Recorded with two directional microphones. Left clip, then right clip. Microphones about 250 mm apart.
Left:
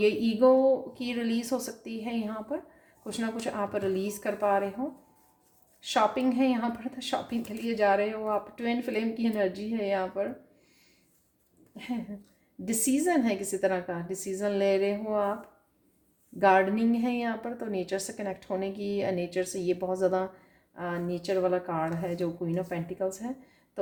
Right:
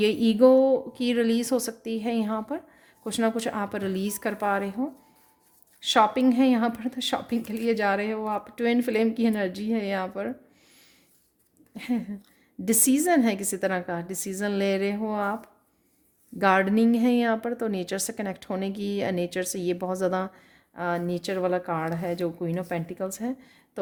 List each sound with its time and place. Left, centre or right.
0.0 s a woman's voice: right
5.8 s a woman's voice: right
12.6 s a woman's voice: right
16.4 s a woman's voice: right